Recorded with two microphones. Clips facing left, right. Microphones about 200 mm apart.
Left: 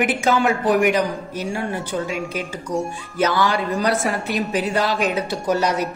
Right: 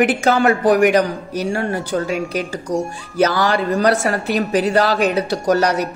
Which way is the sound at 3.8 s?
75° right (ahead or behind).